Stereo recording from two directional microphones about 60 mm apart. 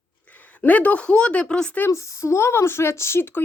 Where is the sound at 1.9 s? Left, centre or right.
Left.